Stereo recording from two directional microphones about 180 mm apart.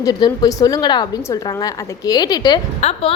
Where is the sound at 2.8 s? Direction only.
35° left (ahead or behind).